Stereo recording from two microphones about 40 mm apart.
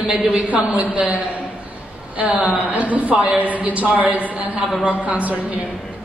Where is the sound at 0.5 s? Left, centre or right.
Right.